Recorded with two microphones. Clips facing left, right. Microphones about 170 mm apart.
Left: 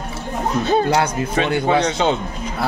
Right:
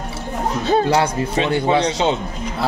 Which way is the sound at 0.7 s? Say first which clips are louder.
Right 2 dB; 30° right (ahead or behind).